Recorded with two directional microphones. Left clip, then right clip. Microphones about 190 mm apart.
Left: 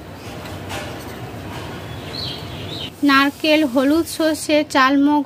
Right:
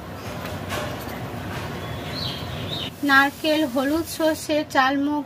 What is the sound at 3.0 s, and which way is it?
A woman's voice, 45° left (ahead or behind).